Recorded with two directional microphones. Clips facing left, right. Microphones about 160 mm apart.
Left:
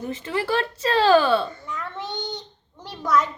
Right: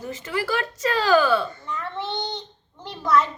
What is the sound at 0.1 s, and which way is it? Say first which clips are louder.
Speech: left 1 dB; 30° left (ahead or behind).